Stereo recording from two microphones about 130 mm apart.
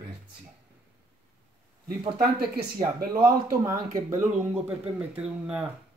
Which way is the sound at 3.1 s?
25° right (ahead or behind).